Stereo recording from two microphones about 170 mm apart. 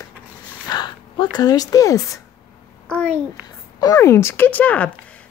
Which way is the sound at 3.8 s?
20° left (ahead or behind).